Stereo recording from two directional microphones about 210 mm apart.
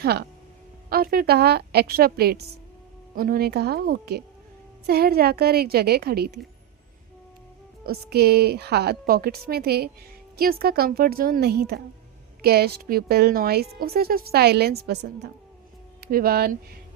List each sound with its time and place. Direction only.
0.0 s a woman's voice: 50° right (ahead or behind)
7.9 s a woman's voice: 50° right (ahead or behind)